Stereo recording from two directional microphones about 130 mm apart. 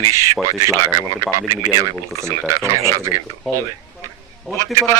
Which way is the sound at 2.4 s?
20° right (ahead or behind).